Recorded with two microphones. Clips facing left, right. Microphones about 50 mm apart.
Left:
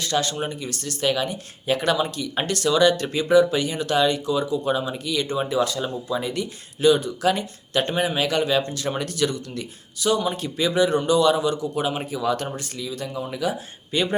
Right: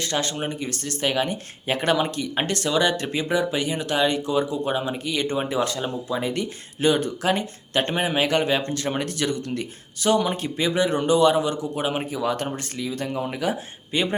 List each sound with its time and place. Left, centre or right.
0.0 s speech: right